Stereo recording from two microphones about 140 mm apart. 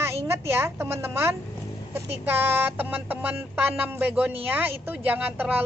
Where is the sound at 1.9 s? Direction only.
15° right (ahead or behind).